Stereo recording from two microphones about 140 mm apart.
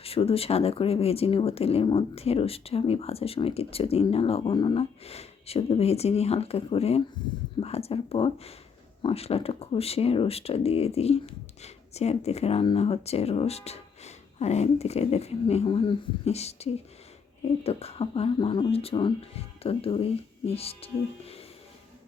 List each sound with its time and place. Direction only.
0.0 s speech: 45° left (ahead or behind)